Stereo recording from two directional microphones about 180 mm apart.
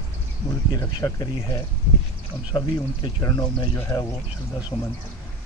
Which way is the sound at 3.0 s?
20° left (ahead or behind).